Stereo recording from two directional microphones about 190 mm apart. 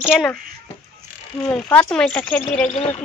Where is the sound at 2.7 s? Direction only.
35° left (ahead or behind).